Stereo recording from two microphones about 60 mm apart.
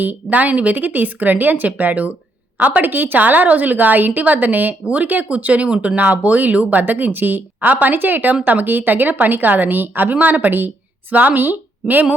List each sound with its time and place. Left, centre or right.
0.0 s a woman's voice: right
6.0 s a woman's voice: right